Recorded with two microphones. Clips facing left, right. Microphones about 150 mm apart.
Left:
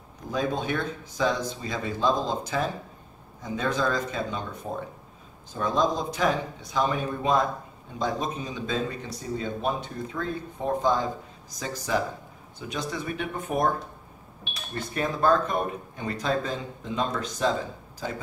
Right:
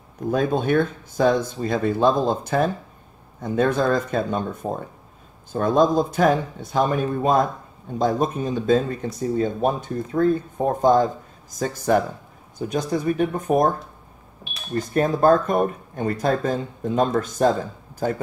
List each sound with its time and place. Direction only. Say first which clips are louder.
0.3 s speech: right 7 dB; 55° right (ahead or behind)